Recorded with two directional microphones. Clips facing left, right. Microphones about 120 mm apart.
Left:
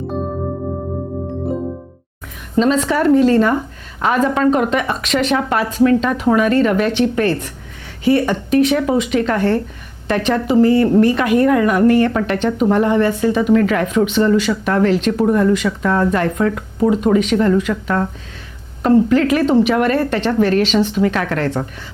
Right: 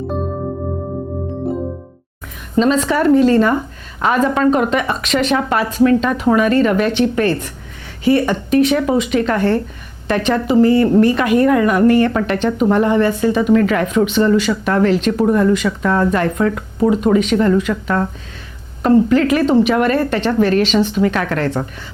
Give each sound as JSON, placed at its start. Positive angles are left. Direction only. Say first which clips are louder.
{"t": 2.6, "sound": "speech", "louder": "right 1 dB", "side_deg": -20}